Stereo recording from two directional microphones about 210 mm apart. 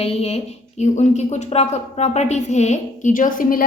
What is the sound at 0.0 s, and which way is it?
Speech, 30° left (ahead or behind).